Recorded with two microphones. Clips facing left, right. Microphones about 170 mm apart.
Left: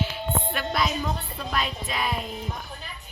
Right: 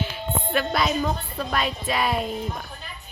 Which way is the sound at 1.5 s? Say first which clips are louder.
Right 4 dB; centre (ahead or behind).